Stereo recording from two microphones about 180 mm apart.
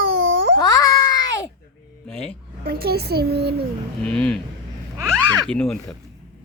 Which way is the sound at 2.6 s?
55° right (ahead or behind).